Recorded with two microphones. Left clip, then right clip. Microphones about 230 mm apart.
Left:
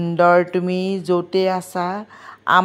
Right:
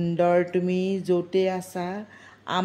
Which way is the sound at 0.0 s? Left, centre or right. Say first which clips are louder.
Left 7 dB; centre.